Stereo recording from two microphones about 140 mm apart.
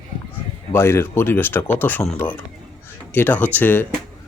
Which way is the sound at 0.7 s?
15° left (ahead or behind).